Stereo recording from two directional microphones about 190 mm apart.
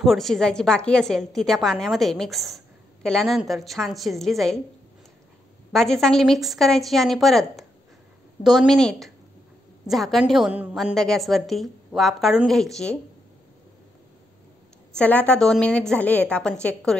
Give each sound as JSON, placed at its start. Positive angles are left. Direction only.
{"t": 0.0, "sound": "a woman's voice", "side_deg": 0}
{"t": 5.7, "sound": "a woman's voice", "side_deg": 0}
{"t": 15.0, "sound": "a woman's voice", "side_deg": 5}